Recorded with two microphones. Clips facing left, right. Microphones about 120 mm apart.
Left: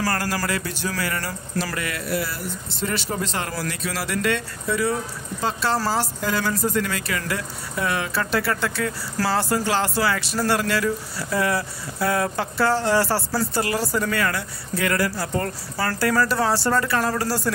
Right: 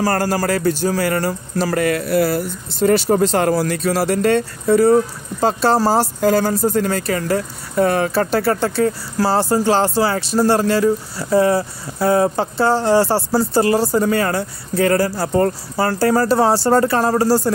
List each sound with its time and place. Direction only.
0.0 s speech: 40° right (ahead or behind)